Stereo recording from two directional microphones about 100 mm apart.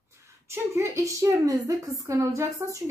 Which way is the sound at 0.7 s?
30° right (ahead or behind).